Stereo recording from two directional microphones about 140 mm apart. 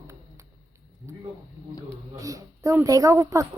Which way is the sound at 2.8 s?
25° right (ahead or behind).